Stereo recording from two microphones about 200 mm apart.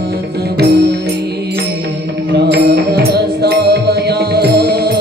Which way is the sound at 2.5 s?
55° right (ahead or behind).